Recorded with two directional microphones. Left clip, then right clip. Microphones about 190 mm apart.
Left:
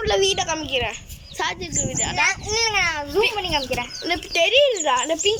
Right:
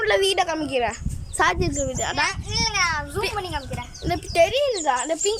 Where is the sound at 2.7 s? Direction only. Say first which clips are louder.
Left 2 dB; 25° left (ahead or behind).